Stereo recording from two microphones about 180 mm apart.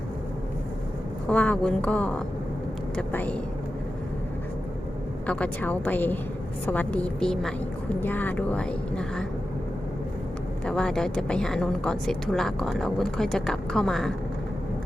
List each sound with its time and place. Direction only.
1.3 s speech: 5° left (ahead or behind)
5.2 s speech: 5° left (ahead or behind)
10.7 s a woman's voice: 5° left (ahead or behind)